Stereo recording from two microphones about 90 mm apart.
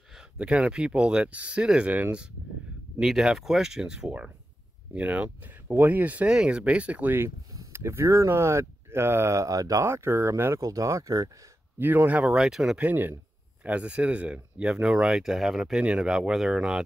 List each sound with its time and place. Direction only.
0.4 s speech: 10° right (ahead or behind); by 9.8 s 40° right (ahead or behind)
9.8 s speech: 30° right (ahead or behind)
11.8 s speech: 20° right (ahead or behind)
12.3 s speech: 5° right (ahead or behind)
12.7 s speech: 20° right (ahead or behind)